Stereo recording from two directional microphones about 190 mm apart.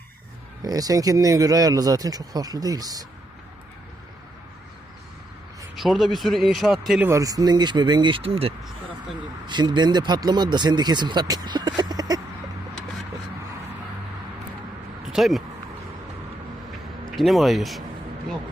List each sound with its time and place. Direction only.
0.6 s speech: 20° right (ahead or behind)
5.7 s speech: centre (ahead or behind)
7.1 s speech: 20° right (ahead or behind)
15.0 s a sound: centre (ahead or behind)
17.2 s speech: centre (ahead or behind)